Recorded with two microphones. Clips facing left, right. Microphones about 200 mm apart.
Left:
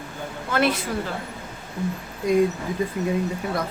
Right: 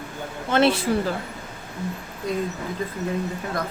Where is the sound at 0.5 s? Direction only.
30° right (ahead or behind).